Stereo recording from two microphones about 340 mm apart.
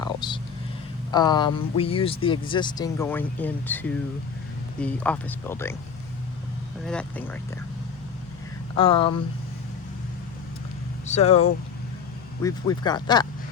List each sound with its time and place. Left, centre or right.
0.0 s vehicle: centre
1.1 s speech: centre
6.8 s speech: centre
8.7 s speech: centre
11.0 s speech: centre